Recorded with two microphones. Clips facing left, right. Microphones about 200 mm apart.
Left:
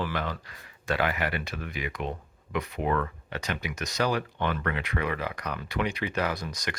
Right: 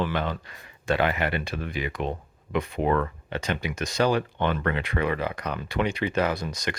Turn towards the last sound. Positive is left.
turn(degrees=-25)  # may be behind; listen again after turning